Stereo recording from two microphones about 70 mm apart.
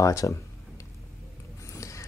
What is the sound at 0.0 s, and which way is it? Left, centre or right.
Speech, left.